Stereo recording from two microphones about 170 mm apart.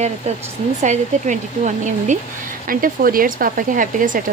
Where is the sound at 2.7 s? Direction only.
55° right (ahead or behind).